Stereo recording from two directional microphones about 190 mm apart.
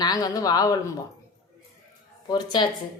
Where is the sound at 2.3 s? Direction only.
25° left (ahead or behind).